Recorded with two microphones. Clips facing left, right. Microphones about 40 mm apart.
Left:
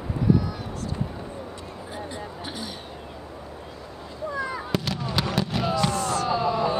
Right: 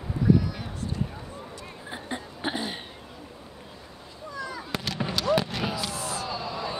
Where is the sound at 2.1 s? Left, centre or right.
Right.